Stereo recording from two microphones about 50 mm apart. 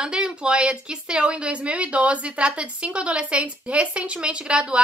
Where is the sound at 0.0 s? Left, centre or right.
Centre.